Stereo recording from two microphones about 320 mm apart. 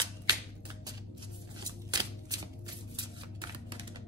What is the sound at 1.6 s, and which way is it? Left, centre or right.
Shuffling cards, centre.